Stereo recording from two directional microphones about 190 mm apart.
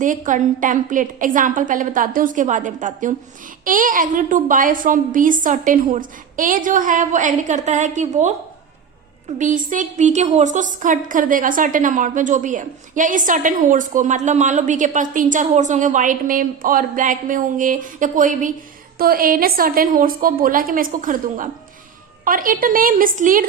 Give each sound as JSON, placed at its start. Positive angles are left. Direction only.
{"t": 0.0, "sound": "a woman's voice", "side_deg": -40}
{"t": 9.4, "sound": "a woman's voice", "side_deg": -40}